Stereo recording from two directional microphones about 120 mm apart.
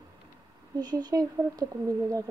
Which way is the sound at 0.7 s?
35° right (ahead or behind).